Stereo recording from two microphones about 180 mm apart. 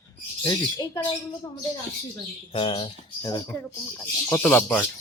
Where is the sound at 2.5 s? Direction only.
30° left (ahead or behind).